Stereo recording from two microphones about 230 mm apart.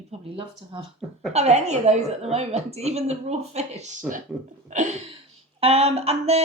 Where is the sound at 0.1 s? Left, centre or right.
Right.